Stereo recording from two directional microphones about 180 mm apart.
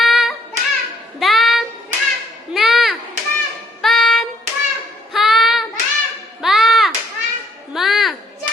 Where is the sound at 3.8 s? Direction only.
Centre (ahead or behind).